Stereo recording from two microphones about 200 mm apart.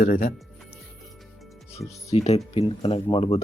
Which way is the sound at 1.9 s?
35° left (ahead or behind).